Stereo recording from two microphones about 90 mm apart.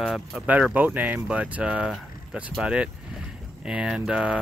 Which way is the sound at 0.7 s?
20° right (ahead or behind).